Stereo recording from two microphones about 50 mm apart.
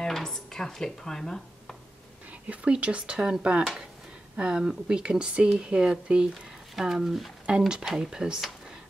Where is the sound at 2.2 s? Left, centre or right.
Right.